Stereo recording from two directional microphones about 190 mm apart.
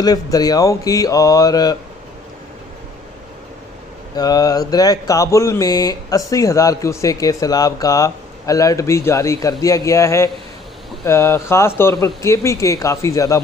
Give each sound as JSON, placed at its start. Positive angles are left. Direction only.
{"t": 0.0, "sound": "mantra", "side_deg": 20}
{"t": 4.1, "sound": "speech", "side_deg": 20}